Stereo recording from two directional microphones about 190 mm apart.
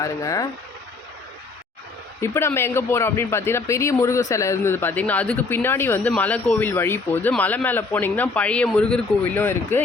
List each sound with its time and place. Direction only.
0.0 s speech: 15° left (ahead or behind)
2.2 s speech: 15° left (ahead or behind)